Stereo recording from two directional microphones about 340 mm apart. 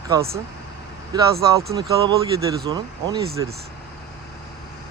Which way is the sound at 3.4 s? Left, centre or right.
Centre.